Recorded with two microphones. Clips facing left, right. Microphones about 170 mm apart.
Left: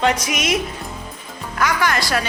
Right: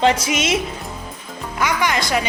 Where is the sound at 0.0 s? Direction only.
30° right (ahead or behind).